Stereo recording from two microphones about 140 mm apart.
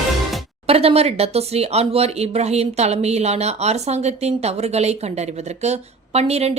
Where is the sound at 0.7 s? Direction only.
45° right (ahead or behind).